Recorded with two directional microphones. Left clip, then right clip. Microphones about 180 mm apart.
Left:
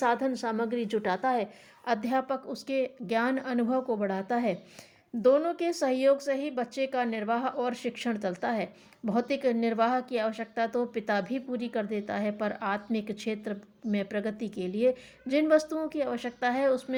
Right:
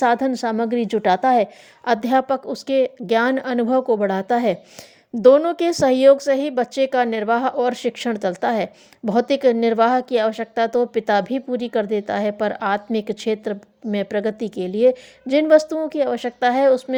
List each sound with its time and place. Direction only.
0.0 s a woman's voice: 45° right (ahead or behind)